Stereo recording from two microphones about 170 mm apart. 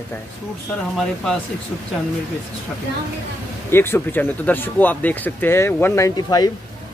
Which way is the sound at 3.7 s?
15° left (ahead or behind).